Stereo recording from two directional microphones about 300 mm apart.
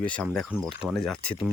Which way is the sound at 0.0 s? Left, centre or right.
Centre.